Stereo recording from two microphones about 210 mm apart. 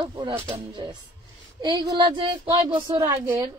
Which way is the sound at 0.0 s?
20° right (ahead or behind).